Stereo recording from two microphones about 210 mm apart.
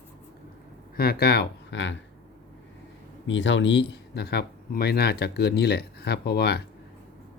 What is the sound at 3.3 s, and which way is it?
Speech, 60° left (ahead or behind).